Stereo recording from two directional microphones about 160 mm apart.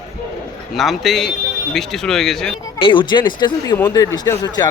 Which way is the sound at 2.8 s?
30° left (ahead or behind).